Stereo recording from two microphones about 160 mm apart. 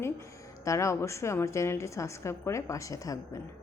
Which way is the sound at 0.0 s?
20° left (ahead or behind).